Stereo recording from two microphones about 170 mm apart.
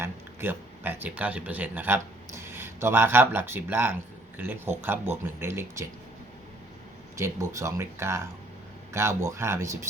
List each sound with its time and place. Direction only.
0.0 s speech: 15° right (ahead or behind)
7.2 s speech: 15° right (ahead or behind)